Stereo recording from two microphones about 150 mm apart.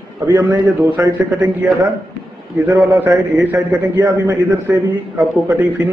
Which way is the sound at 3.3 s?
10° right (ahead or behind).